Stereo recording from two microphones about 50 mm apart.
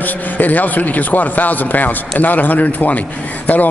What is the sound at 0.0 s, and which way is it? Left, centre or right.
A man's voice, left.